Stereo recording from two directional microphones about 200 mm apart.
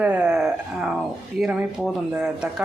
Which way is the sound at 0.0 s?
5° right (ahead or behind).